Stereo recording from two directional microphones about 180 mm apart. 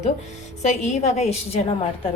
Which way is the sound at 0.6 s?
40° left (ahead or behind).